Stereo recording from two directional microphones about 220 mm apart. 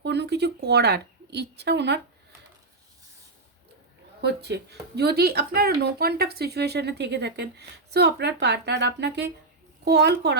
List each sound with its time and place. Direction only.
0.0 s a woman's voice: 50° right (ahead or behind)
4.2 s speech: 50° right (ahead or behind)